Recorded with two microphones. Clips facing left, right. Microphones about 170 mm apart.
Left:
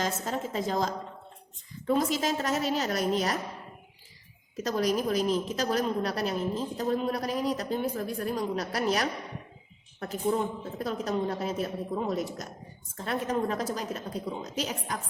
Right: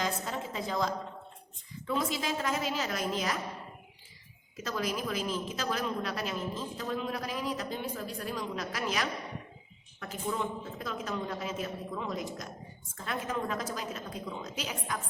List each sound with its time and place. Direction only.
0.0 s a woman's voice: 45° left (ahead or behind)
4.5 s a woman's voice: 40° left (ahead or behind)